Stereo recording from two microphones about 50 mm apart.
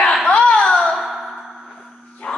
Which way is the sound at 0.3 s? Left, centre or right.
Left.